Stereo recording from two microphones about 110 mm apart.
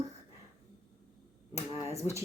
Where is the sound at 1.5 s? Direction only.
25° right (ahead or behind).